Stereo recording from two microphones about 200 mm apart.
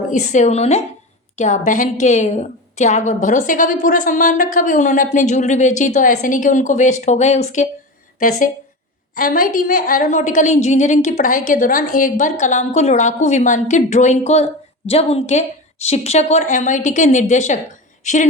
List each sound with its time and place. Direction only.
0.1 s a woman's voice: 35° left (ahead or behind)